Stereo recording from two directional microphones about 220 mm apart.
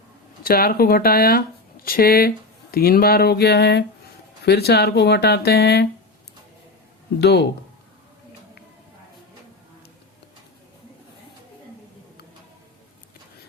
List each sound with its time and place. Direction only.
0.4 s speech: 40° left (ahead or behind)
7.2 s speech: 50° left (ahead or behind)